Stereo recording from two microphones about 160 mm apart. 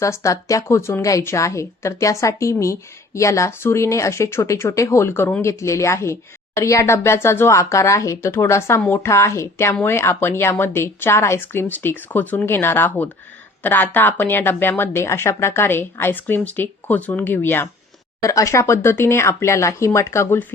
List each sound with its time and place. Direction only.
0.0 s a woman's voice: 20° left (ahead or behind)